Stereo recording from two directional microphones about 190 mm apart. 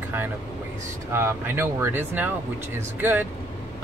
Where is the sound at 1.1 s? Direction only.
15° right (ahead or behind).